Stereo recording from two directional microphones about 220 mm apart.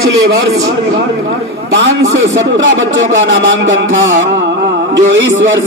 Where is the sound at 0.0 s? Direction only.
15° right (ahead or behind).